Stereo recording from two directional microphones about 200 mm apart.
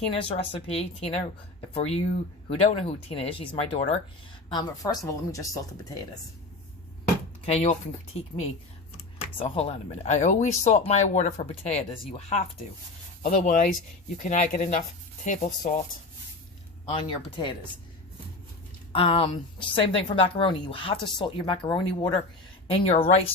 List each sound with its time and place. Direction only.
0.1 s a woman's voice: 25° left (ahead or behind)
4.4 s a woman's voice: 20° left (ahead or behind)
7.4 s speech: 30° left (ahead or behind)
9.1 s speech: 30° left (ahead or behind)
16.9 s a woman's voice: 25° left (ahead or behind)
18.9 s a woman's voice: 25° left (ahead or behind)